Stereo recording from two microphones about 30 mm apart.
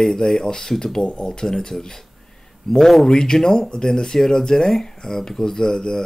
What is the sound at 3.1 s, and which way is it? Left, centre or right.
Speech, left.